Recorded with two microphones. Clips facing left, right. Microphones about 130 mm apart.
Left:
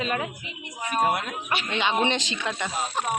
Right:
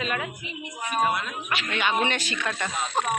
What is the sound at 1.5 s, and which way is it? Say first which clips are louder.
Speech: left 1 dB; 25° left (ahead or behind).